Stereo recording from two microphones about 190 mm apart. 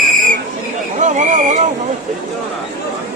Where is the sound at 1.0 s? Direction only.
40° right (ahead or behind).